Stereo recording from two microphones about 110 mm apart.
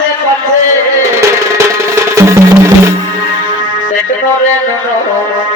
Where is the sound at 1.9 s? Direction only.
25° right (ahead or behind).